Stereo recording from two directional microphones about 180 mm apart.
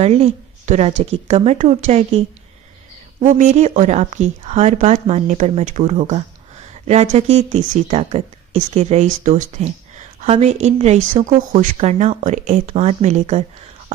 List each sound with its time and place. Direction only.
0.0 s speech: 35° right (ahead or behind)